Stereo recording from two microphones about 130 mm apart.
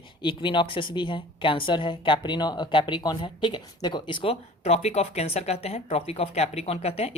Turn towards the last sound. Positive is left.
turn(degrees=55)  # may be behind; listen again after turning